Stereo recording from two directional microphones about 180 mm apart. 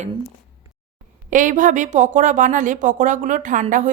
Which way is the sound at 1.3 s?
45° right (ahead or behind).